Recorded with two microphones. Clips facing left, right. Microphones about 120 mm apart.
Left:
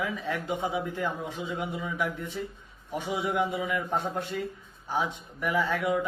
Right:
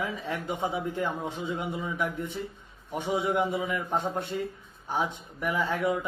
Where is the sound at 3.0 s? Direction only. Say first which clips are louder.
Right 1 dB; 25° right (ahead or behind).